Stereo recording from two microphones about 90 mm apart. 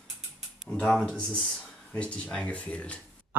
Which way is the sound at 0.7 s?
5° left (ahead or behind).